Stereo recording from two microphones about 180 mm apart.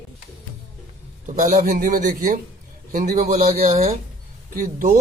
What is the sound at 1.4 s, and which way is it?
Speech, 45° right (ahead or behind).